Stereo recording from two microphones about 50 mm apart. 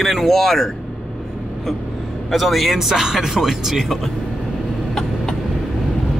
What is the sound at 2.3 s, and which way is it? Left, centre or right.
Speech, centre.